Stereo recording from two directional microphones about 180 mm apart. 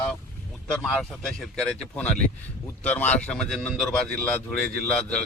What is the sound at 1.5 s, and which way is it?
A man's voice, 5° left (ahead or behind).